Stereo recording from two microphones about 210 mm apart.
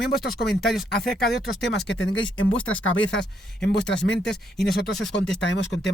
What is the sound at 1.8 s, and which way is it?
Speech, 60° left (ahead or behind).